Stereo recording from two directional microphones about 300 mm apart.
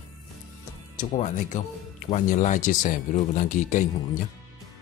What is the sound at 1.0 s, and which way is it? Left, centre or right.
Speech, left.